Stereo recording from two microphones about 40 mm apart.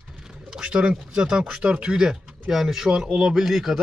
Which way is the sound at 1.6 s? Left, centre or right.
Right.